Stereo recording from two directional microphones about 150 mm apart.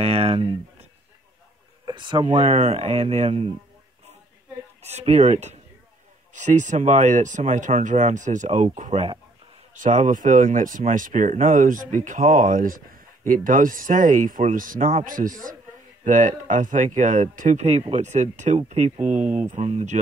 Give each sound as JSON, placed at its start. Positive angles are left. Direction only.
{"t": 0.0, "sound": "speech", "side_deg": -40}
{"t": 1.9, "sound": "speech", "side_deg": -35}
{"t": 2.3, "sound": "speech", "side_deg": -45}
{"t": 4.8, "sound": "speech", "side_deg": -45}
{"t": 9.8, "sound": "speech", "side_deg": -55}